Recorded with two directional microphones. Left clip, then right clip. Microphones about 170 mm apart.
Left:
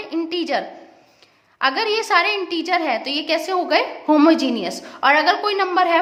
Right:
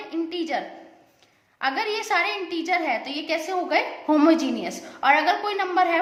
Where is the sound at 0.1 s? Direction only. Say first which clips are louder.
Left 5 dB; 35° left (ahead or behind).